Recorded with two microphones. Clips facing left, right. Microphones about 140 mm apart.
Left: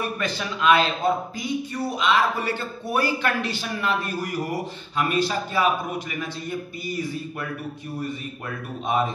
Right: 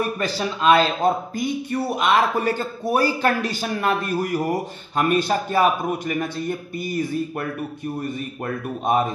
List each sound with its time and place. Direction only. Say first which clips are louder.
0.2 s speech: right 3 dB; 35° right (ahead or behind)
1.7 s a man's voice: right 3 dB; 55° right (ahead or behind)
8.8 s a man's voice: right 3 dB; 45° right (ahead or behind)